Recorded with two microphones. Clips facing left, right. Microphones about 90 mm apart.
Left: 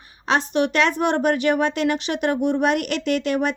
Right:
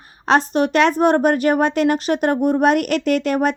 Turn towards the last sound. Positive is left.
turn(degrees=-45)  # may be behind; listen again after turning